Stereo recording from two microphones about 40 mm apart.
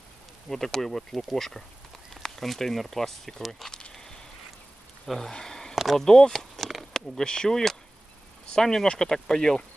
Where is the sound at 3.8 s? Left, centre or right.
Centre.